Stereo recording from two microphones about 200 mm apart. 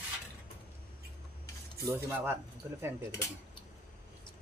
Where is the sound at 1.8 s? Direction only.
10° right (ahead or behind).